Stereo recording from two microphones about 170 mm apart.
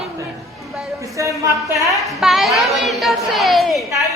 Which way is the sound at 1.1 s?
20° right (ahead or behind).